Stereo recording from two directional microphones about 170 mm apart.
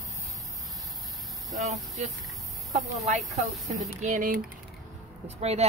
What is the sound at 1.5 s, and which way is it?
Speech, centre (ahead or behind).